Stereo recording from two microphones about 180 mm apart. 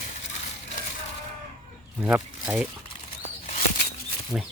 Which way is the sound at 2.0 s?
5° right (ahead or behind).